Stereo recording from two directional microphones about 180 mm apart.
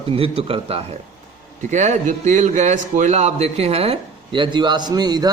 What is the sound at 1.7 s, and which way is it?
A man's voice, 40° right (ahead or behind).